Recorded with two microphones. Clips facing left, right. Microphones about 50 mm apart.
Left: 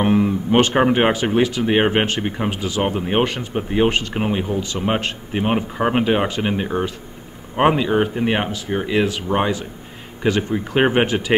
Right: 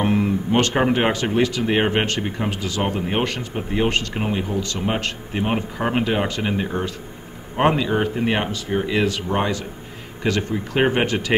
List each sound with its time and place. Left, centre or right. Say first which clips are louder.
0.6 s speech: left 4 dB; centre